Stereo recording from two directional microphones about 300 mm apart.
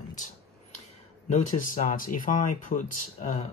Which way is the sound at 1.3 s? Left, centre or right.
Left.